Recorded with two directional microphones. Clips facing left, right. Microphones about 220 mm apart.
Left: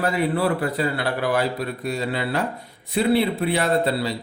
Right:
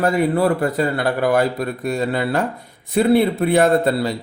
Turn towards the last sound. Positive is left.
turn(degrees=-50)  # may be behind; listen again after turning